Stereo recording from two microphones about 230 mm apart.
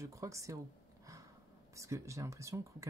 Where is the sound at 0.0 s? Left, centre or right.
Centre.